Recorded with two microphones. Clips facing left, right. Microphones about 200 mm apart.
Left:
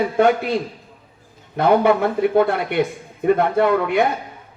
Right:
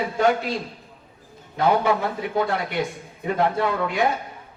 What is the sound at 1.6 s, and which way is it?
Speech, 60° left (ahead or behind).